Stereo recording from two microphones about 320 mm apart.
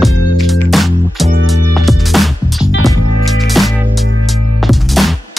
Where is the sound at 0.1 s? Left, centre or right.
Left.